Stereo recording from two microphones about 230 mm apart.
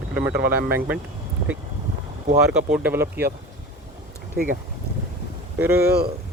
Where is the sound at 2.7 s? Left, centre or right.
Centre.